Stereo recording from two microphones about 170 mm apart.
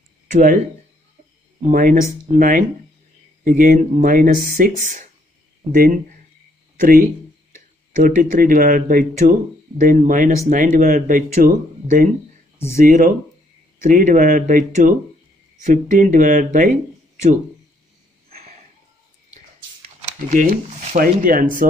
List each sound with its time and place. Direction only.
0.3 s speech: 50° right (ahead or behind)
1.7 s speech: 55° right (ahead or behind)
20.1 s speech: 50° right (ahead or behind)